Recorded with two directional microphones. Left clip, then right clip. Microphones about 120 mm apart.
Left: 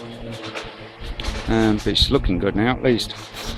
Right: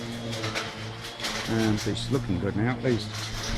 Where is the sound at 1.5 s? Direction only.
40° left (ahead or behind).